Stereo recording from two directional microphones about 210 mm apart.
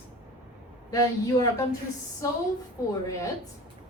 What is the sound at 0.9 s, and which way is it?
Speech, 15° left (ahead or behind).